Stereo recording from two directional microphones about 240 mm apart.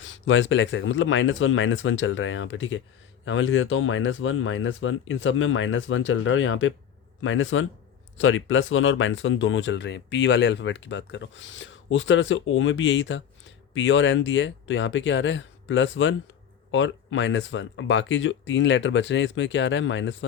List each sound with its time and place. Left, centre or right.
0.0 s a man's voice: left